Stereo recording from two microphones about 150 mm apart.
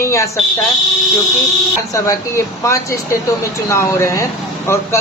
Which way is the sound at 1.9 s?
20° left (ahead or behind).